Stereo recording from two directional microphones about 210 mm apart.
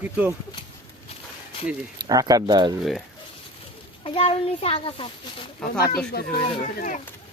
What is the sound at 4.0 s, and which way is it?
A child's voice, 30° left (ahead or behind).